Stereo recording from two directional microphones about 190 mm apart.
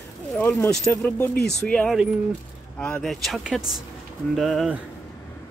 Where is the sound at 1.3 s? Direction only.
60° left (ahead or behind).